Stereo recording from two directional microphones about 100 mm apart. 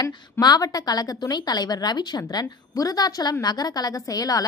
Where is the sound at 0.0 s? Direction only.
40° left (ahead or behind).